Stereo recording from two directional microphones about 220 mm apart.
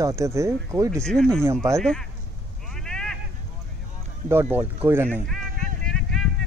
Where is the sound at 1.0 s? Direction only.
5° left (ahead or behind).